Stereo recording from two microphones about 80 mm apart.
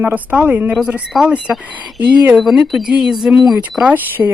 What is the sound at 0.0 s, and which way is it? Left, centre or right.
Speech, right.